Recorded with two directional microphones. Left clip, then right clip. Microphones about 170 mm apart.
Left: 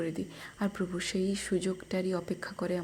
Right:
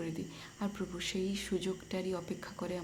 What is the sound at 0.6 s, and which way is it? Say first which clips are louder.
Speech: left 5 dB; 25° left (ahead or behind).